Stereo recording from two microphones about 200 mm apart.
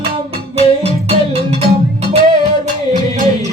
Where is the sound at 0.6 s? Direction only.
30° right (ahead or behind).